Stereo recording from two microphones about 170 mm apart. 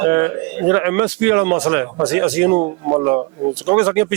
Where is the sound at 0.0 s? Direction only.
10° right (ahead or behind).